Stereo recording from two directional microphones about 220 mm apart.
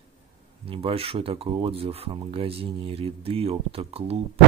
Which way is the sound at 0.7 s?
25° right (ahead or behind).